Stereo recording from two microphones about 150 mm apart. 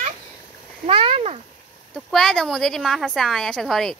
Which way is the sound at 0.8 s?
40° right (ahead or behind).